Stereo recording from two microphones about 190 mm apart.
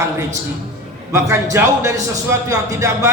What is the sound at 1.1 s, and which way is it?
A woman's voice, 15° right (ahead or behind).